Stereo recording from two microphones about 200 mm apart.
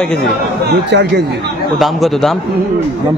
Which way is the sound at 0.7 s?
60° right (ahead or behind).